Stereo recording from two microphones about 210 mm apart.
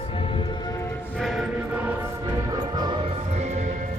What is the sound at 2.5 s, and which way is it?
Music, 20° right (ahead or behind).